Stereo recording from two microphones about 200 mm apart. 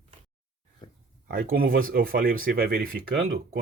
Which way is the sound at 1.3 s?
45° right (ahead or behind).